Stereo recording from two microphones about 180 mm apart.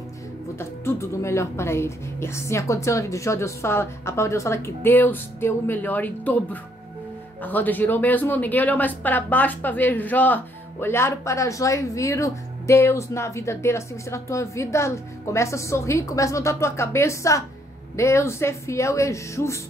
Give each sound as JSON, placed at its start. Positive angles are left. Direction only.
{"t": 0.6, "sound": "a woman's voice", "side_deg": 15}